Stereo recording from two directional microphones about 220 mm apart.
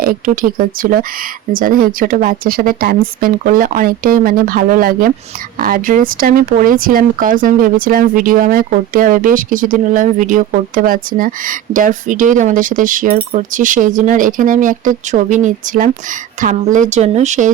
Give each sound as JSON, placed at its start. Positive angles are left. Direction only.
{"t": 0.0, "sound": "speech", "side_deg": -40}